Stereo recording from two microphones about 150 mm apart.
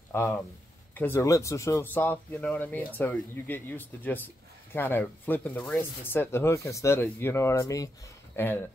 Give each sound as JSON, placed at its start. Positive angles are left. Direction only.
{"t": 0.1, "sound": "speech", "side_deg": 15}